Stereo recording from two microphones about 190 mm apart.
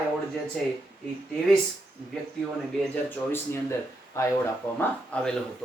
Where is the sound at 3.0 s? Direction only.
10° left (ahead or behind).